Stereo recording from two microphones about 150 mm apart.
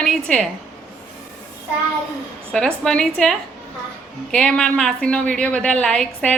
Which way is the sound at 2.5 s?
5° left (ahead or behind).